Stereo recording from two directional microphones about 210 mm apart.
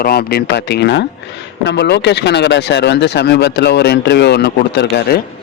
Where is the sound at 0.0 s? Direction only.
45° left (ahead or behind).